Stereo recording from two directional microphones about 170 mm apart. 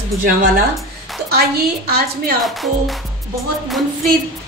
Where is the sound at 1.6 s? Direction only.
65° right (ahead or behind).